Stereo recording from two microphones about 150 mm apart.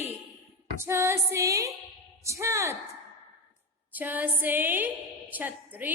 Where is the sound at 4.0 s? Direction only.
10° right (ahead or behind).